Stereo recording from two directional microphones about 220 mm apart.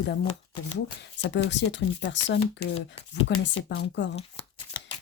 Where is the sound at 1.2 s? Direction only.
55° left (ahead or behind).